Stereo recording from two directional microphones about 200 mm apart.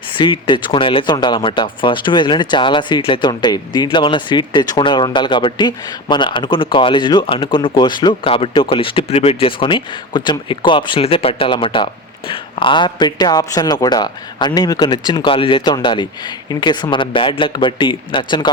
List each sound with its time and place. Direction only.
0.2 s speech: 25° left (ahead or behind)